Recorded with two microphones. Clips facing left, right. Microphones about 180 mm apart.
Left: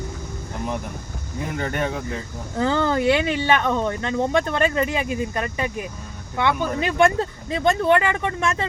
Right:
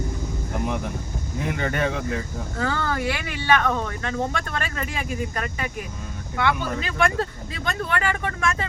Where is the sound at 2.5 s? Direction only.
20° left (ahead or behind).